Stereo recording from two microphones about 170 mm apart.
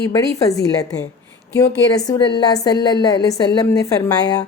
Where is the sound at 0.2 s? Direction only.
20° left (ahead or behind).